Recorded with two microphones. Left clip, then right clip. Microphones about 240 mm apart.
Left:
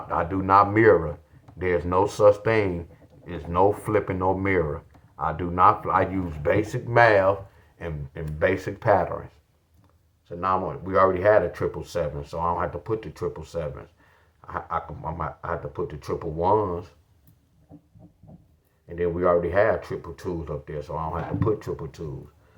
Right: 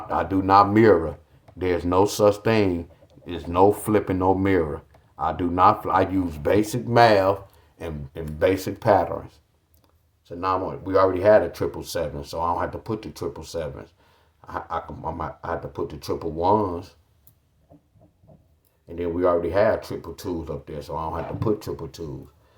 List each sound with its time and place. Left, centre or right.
0.1 s speech: right
18.9 s speech: right